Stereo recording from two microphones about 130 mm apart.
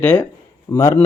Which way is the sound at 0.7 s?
35° left (ahead or behind).